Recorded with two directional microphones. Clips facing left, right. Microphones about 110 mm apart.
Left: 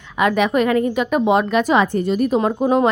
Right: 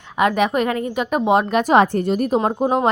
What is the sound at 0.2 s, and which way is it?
A woman's voice, 45° right (ahead or behind).